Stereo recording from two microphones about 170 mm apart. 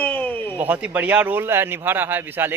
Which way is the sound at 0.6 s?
10° right (ahead or behind).